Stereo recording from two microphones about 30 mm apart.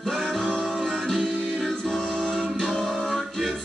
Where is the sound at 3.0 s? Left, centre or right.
Centre.